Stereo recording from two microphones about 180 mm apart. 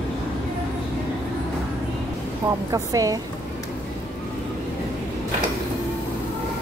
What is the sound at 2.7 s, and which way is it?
Speech, 20° right (ahead or behind).